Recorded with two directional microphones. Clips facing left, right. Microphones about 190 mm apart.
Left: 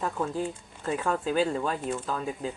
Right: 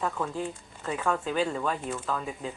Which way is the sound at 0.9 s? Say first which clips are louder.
Left 1 dB; 35° left (ahead or behind).